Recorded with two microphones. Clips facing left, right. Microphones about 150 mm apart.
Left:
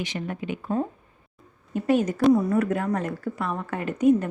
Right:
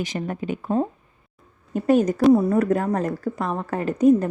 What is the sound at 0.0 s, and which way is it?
A woman's voice, 40° right (ahead or behind).